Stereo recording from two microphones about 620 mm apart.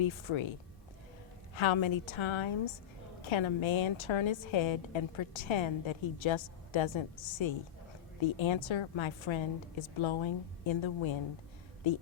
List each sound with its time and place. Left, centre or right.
0.0 s a woman's voice: left
1.5 s a woman's voice: left